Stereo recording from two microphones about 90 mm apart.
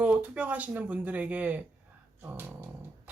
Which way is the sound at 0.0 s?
15° right (ahead or behind).